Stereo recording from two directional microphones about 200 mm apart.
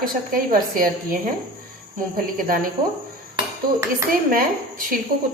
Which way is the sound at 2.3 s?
45° right (ahead or behind).